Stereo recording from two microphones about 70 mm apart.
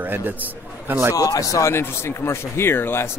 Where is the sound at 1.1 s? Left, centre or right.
Left.